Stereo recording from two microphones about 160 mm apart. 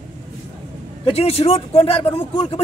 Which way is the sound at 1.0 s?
40° left (ahead or behind).